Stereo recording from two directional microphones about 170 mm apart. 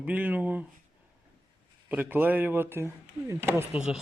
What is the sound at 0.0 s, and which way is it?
Speech, 10° right (ahead or behind).